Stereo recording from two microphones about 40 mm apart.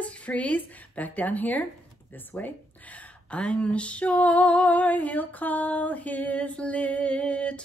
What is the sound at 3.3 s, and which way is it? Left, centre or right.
Female singing, left.